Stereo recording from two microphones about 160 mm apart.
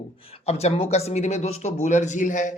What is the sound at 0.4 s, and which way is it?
Speech, 40° left (ahead or behind).